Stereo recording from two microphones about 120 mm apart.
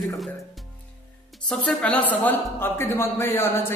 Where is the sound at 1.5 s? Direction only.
5° left (ahead or behind).